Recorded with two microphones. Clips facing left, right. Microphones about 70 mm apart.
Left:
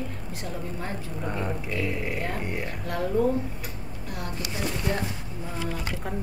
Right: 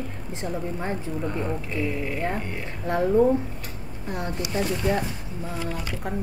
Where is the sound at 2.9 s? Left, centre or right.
Right.